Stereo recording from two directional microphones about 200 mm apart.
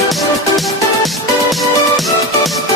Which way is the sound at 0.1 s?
Centre (ahead or behind).